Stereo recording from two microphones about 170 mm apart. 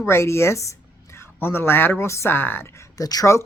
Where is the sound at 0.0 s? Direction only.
15° left (ahead or behind).